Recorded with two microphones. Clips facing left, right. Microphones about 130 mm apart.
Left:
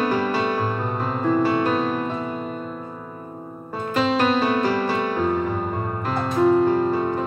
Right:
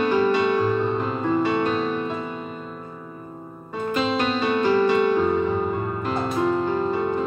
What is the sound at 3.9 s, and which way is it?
Music, 40° left (ahead or behind).